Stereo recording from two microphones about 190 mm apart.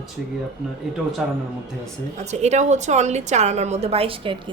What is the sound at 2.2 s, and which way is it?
A woman's voice, 35° right (ahead or behind).